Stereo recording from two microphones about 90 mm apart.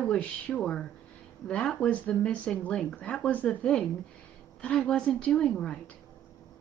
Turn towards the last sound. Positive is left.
turn(degrees=10)  # may be behind; listen again after turning